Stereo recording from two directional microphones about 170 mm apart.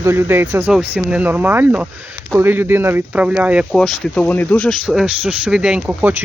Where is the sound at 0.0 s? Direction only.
15° right (ahead or behind).